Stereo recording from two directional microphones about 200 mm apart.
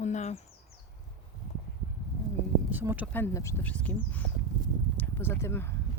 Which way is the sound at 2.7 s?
10° right (ahead or behind).